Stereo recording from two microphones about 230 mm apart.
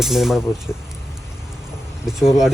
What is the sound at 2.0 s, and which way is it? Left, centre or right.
Speech, centre.